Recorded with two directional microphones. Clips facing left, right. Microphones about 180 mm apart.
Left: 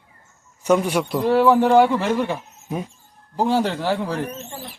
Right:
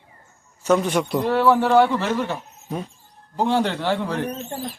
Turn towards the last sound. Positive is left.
turn(degrees=5)  # may be behind; listen again after turning